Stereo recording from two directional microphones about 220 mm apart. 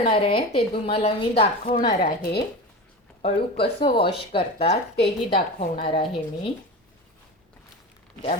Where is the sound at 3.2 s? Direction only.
25° left (ahead or behind).